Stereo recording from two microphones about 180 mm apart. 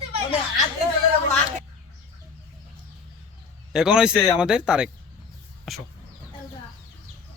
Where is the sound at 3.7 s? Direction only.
5° right (ahead or behind).